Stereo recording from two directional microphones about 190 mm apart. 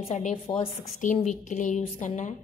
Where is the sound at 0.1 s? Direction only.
40° left (ahead or behind).